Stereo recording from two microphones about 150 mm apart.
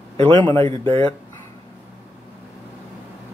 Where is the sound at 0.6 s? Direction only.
35° right (ahead or behind).